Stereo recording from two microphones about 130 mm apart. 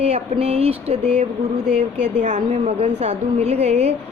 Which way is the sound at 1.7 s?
65° right (ahead or behind).